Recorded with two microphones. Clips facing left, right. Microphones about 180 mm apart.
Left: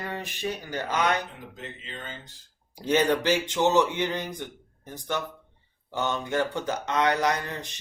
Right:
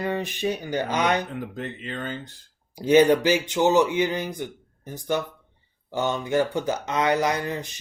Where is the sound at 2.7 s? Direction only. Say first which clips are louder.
Right 7 dB; 10° right (ahead or behind).